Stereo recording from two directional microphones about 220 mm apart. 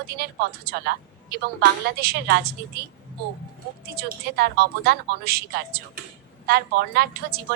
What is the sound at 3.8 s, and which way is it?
A woman's voice, 45° right (ahead or behind).